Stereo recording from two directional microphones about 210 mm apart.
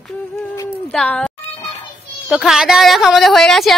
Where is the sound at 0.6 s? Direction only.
5° left (ahead or behind).